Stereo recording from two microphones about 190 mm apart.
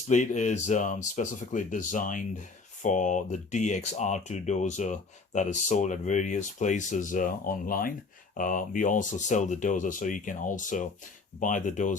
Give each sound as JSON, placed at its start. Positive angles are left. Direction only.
{"t": 0.1, "sound": "speech", "side_deg": 40}